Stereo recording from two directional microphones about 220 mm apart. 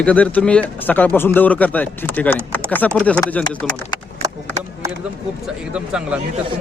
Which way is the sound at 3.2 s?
5° left (ahead or behind).